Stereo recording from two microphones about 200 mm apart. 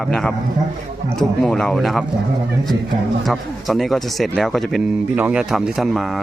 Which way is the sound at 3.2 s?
Centre (ahead or behind).